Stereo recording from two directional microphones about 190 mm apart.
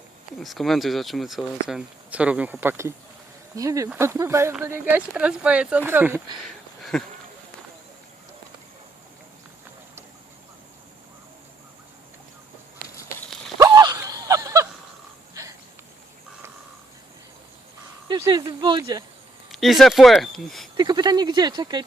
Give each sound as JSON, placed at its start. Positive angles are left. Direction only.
{"t": 0.3, "sound": "speech", "side_deg": 0}
{"t": 6.9, "sound": "speech", "side_deg": 5}
{"t": 13.6, "sound": "a sound", "side_deg": -20}
{"t": 18.1, "sound": "speech", "side_deg": -20}
{"t": 19.5, "sound": "speech", "side_deg": 0}
{"t": 20.7, "sound": "speech", "side_deg": -20}